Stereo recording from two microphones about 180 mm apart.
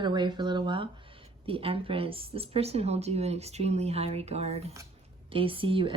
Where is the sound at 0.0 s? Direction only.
25° right (ahead or behind).